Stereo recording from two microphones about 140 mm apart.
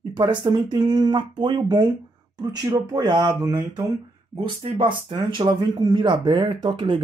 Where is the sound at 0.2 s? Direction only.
30° right (ahead or behind).